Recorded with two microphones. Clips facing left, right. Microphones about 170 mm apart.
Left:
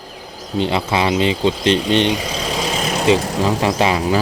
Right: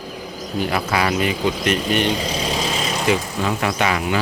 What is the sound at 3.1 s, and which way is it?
Speech, 85° left.